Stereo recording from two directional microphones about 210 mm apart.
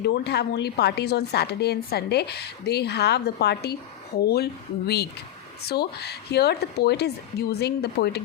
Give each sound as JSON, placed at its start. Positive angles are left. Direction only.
{"t": 0.0, "sound": "a woman's voice", "side_deg": 50}
{"t": 5.6, "sound": "a woman's voice", "side_deg": 50}